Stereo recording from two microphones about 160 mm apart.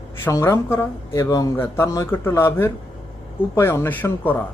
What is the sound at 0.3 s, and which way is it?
Speech, 20° left (ahead or behind).